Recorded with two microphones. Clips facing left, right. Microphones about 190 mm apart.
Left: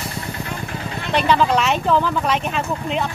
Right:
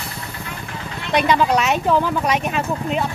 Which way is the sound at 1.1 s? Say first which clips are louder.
Even; 10° right (ahead or behind).